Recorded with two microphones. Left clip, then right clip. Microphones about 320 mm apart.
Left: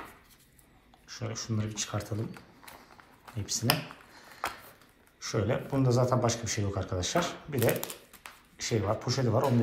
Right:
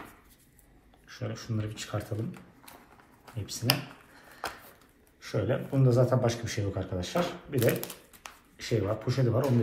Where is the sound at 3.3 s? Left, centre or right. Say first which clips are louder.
Left 5 dB; centre.